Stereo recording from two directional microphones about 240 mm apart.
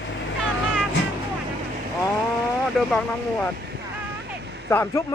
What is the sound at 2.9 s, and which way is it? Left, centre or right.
Speech, centre.